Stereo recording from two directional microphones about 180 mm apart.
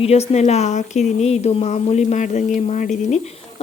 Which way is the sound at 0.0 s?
35° left (ahead or behind).